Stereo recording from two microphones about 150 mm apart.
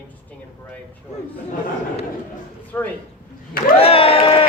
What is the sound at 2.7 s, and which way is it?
Speech, 15° left (ahead or behind).